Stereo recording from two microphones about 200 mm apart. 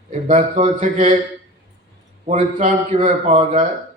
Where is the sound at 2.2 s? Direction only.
35° right (ahead or behind).